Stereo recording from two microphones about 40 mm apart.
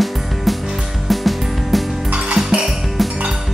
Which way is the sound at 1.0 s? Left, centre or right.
Centre.